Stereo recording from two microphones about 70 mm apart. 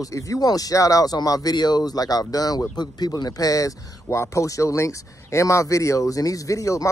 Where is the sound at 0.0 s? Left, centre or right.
Left.